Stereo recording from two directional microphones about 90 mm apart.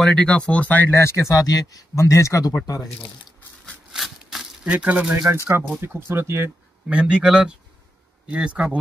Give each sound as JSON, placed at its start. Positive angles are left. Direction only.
{"t": 0.0, "sound": "speech", "side_deg": 10}
{"t": 1.3, "sound": "speech", "side_deg": 45}
{"t": 3.9, "sound": "a sound", "side_deg": -5}
{"t": 4.6, "sound": "speech", "side_deg": -15}
{"t": 5.1, "sound": "speech", "side_deg": -30}
{"t": 6.9, "sound": "speech", "side_deg": -10}